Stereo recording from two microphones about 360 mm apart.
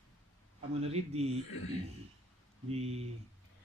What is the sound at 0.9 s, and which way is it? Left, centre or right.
Speech, centre.